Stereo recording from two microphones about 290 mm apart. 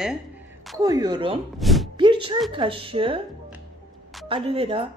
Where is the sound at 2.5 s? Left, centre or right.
Centre.